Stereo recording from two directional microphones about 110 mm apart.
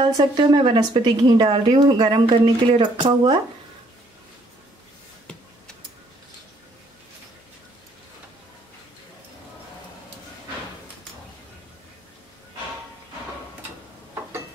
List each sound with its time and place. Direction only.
0.0 s speech: 40° right (ahead or behind)